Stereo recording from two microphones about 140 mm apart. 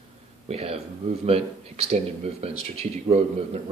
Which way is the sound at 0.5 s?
45° right (ahead or behind).